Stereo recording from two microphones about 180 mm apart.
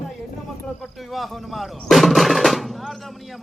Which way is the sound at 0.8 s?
Centre (ahead or behind).